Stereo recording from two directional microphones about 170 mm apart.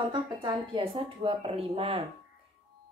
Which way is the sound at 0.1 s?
30° right (ahead or behind).